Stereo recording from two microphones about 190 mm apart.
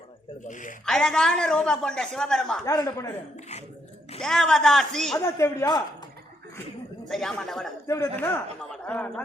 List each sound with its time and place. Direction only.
0.4 s speech: 40° left (ahead or behind)
0.9 s a woman's voice: 5° left (ahead or behind)
2.6 s speech: 15° left (ahead or behind)
4.2 s a woman's voice: centre (ahead or behind)
5.1 s speech: 15° left (ahead or behind)
7.1 s a woman's voice: 5° left (ahead or behind)
7.9 s speech: 15° left (ahead or behind)